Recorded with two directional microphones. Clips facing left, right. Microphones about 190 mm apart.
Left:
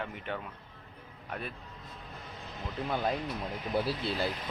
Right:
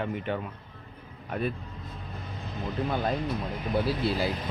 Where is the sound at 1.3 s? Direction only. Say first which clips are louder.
Right 9 dB; 5° right (ahead or behind).